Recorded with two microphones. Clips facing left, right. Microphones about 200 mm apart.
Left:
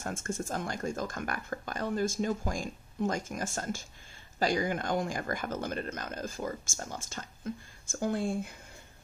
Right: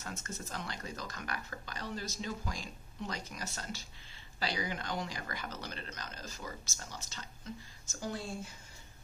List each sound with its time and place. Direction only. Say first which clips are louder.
0.0 s speech: left 8 dB; 50° left (ahead or behind)